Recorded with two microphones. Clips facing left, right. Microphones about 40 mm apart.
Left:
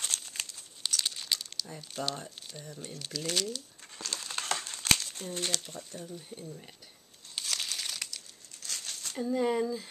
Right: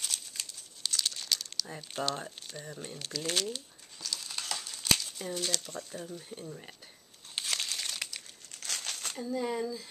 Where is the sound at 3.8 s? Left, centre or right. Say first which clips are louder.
Left 1 dB; left.